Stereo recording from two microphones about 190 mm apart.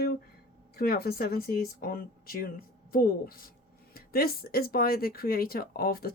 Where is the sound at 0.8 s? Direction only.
55° left (ahead or behind).